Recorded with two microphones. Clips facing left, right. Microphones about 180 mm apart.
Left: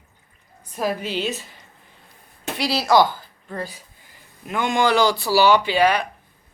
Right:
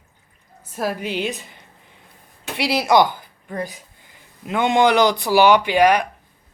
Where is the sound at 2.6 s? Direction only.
20° right (ahead or behind).